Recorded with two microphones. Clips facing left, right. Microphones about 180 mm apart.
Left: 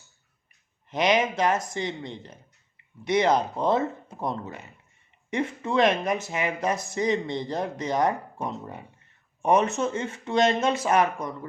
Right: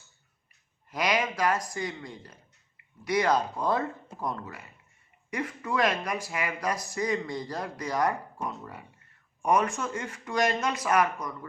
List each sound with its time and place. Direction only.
0.9 s speech: 25° left (ahead or behind)